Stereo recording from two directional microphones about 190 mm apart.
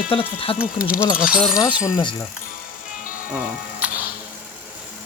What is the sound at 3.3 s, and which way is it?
Music, 5° right (ahead or behind).